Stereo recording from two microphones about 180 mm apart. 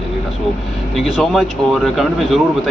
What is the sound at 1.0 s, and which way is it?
A man's voice, centre (ahead or behind).